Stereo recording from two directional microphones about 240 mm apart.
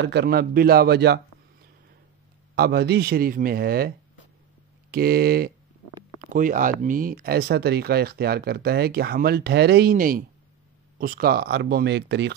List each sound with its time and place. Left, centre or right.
0.0 s a man's voice: right
2.5 s speech: right
4.9 s speech: right